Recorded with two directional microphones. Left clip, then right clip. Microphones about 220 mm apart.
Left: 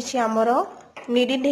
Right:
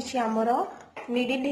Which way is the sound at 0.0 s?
30° left (ahead or behind).